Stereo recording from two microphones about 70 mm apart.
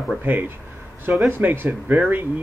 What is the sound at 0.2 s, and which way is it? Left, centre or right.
Speech, right.